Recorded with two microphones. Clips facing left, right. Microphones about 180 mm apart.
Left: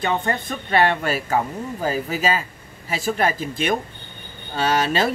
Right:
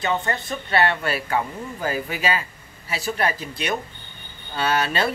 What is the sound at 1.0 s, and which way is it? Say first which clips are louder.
Speech: left 2 dB; 45° left (ahead or behind).